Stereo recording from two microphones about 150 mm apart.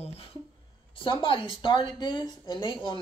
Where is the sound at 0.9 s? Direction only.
35° left (ahead or behind).